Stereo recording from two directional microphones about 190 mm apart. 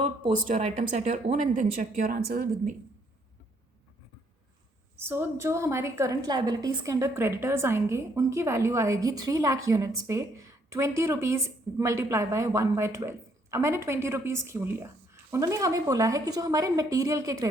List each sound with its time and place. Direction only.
0.3 s speech: 40° right (ahead or behind)
4.9 s a woman's voice: 10° right (ahead or behind)